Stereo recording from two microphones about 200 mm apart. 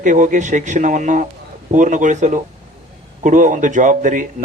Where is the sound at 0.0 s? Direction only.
40° right (ahead or behind).